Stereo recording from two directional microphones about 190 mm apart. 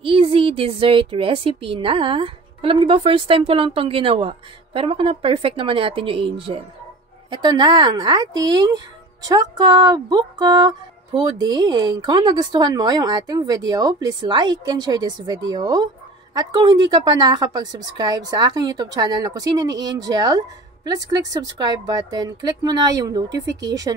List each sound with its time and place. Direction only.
0.0 s speech: 30° right (ahead or behind)